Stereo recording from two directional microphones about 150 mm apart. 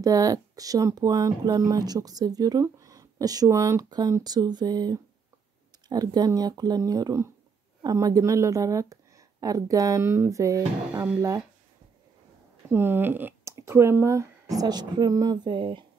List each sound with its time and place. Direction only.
0.0 s speech: 25° right (ahead or behind)
12.6 s speech: 15° right (ahead or behind); by 15.8 s 30° right (ahead or behind)